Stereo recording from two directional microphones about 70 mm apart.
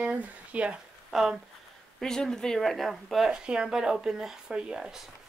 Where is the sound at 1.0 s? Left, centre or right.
Centre.